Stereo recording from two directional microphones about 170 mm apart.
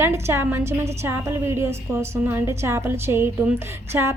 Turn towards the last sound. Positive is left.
turn(degrees=-15)  # may be behind; listen again after turning